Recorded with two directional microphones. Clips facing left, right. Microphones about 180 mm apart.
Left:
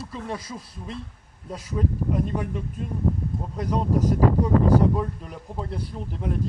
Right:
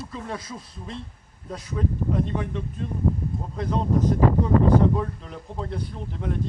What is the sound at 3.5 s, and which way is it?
Speech, 10° left (ahead or behind).